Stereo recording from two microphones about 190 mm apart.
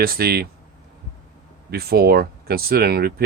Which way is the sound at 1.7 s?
55° right (ahead or behind).